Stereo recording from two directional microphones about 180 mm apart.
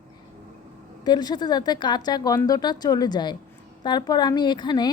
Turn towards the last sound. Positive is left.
turn(degrees=25)  # may be behind; listen again after turning